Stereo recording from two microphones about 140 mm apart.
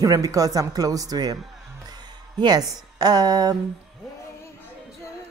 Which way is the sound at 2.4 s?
30° right (ahead or behind).